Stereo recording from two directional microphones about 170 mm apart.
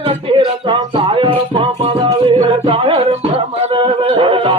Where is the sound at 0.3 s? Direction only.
30° right (ahead or behind).